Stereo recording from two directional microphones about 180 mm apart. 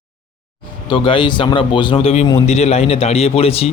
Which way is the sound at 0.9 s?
30° left (ahead or behind).